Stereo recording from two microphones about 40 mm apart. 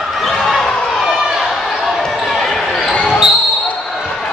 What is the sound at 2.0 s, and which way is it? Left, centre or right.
Basketball bounce, centre.